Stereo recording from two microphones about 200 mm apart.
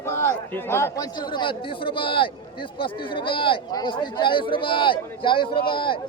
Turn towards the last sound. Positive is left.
turn(degrees=25)  # may be behind; listen again after turning